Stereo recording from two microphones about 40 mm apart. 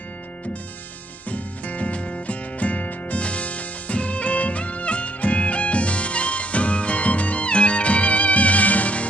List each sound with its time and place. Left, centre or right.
1.3 s music: left